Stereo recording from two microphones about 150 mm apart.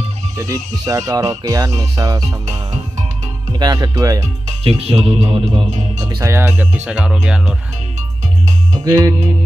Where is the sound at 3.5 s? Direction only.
25° right (ahead or behind).